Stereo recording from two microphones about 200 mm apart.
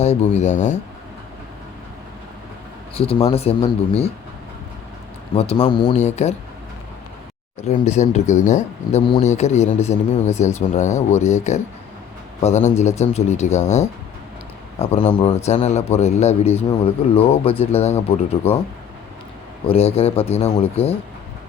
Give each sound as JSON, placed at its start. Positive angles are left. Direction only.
{"t": 0.0, "sound": "speech", "side_deg": 35}
{"t": 2.9, "sound": "speech", "side_deg": 30}
{"t": 5.3, "sound": "speech", "side_deg": 30}
{"t": 6.2, "sound": "speech", "side_deg": 35}
{"t": 7.7, "sound": "speech", "side_deg": 35}
{"t": 16.5, "sound": "speech", "side_deg": 10}
{"t": 16.8, "sound": "speech", "side_deg": 30}
{"t": 19.6, "sound": "speech", "side_deg": 30}